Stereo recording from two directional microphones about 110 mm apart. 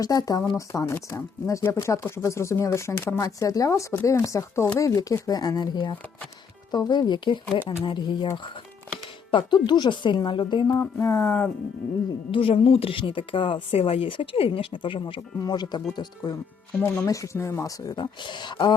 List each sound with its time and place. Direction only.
0.0 s speech: 35° left (ahead or behind)
9.3 s speech: 45° left (ahead or behind)
10.8 s speech: 25° left (ahead or behind)
12.3 s speech: 60° left (ahead or behind); by 15.8 s 40° left (ahead or behind)
16.8 s speech: 25° left (ahead or behind)
17.9 s speech: 45° left (ahead or behind)